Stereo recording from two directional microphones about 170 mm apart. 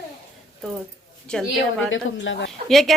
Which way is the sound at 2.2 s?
90° left.